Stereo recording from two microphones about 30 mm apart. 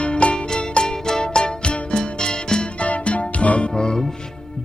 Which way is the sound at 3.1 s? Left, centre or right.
Left.